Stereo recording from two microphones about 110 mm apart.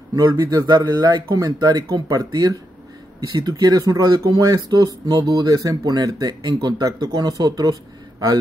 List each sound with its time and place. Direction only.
0.1 s speech: 35° right (ahead or behind)